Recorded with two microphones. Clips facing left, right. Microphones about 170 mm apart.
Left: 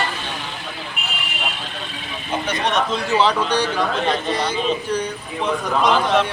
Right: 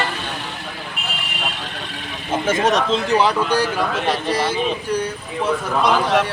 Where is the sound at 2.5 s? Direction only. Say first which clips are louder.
Right 5 dB; 45° right (ahead or behind).